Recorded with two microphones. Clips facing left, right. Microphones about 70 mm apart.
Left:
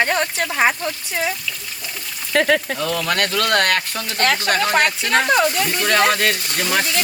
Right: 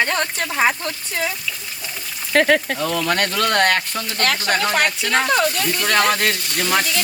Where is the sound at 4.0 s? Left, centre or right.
Left.